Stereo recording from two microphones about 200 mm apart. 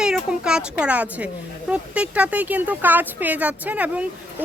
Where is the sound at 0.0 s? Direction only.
5° right (ahead or behind).